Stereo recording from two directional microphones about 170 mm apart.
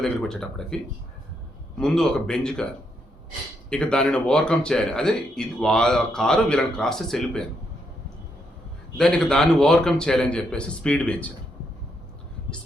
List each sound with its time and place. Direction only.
0.0 s speech: 5° left (ahead or behind)
1.8 s speech: 5° left (ahead or behind)
3.7 s speech: 5° left (ahead or behind)
9.0 s speech: 5° left (ahead or behind)